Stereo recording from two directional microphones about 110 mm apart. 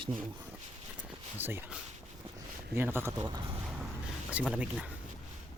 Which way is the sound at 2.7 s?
20° right (ahead or behind).